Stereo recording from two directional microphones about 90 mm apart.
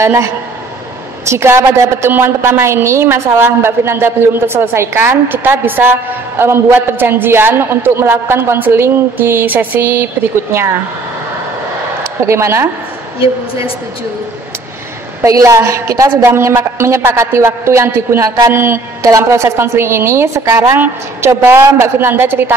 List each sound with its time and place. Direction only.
0.0 s a woman's voice: 30° right (ahead or behind)
12.2 s a woman's voice: 30° right (ahead or behind)
15.2 s a woman's voice: 35° right (ahead or behind)